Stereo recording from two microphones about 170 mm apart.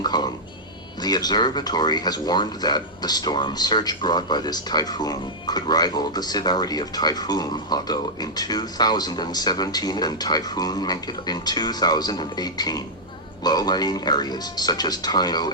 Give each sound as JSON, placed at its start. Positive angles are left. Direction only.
{"t": 0.0, "sound": "speech", "side_deg": 25}